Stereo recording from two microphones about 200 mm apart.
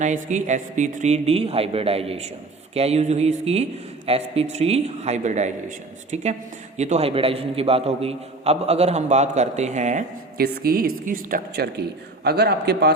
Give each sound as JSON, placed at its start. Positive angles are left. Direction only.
{"t": 0.0, "sound": "a man's voice", "side_deg": -35}